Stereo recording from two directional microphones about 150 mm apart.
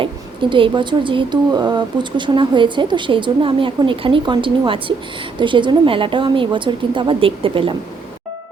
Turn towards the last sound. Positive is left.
turn(degrees=-35)  # may be behind; listen again after turning